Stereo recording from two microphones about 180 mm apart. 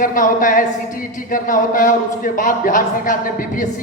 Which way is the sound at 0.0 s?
50° left (ahead or behind).